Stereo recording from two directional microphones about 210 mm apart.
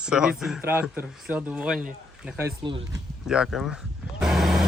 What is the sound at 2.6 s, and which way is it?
Speech, 25° right (ahead or behind).